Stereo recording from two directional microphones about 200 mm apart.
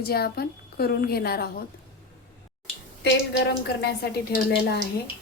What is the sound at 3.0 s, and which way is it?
A woman's voice, 55° left (ahead or behind).